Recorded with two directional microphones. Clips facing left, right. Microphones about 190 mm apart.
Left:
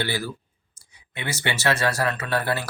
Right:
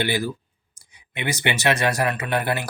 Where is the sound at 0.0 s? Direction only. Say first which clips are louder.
Right 4 dB; 15° right (ahead or behind).